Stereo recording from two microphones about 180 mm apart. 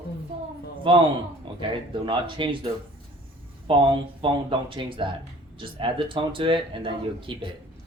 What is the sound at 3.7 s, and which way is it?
Speech, 30° right (ahead or behind).